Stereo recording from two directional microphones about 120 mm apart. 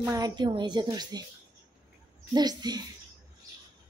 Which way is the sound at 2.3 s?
35° right (ahead or behind).